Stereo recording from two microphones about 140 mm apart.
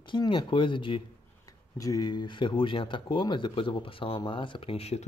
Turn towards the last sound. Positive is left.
turn(degrees=45)  # may be behind; listen again after turning